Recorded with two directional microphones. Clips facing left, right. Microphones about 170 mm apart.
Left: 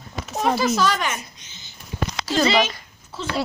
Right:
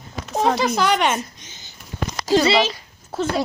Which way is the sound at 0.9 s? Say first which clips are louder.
Right 7 dB; 25° right (ahead or behind).